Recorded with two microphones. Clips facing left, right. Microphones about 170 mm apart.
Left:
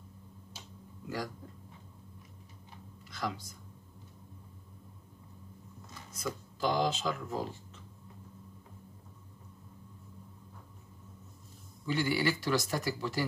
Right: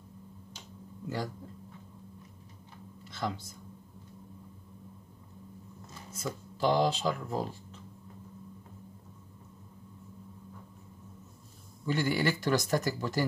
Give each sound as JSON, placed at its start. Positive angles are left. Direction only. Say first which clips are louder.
{"t": 1.0, "sound": "a sound", "louder": "right 2 dB", "side_deg": -25}
{"t": 3.1, "sound": "speech", "louder": "right 2 dB", "side_deg": -25}
{"t": 6.1, "sound": "speech", "louder": "right 1 dB", "side_deg": -30}
{"t": 11.8, "sound": "speech", "louder": "right 1 dB", "side_deg": -45}